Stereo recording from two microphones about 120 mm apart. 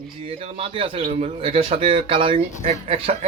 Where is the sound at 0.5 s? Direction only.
50° right (ahead or behind).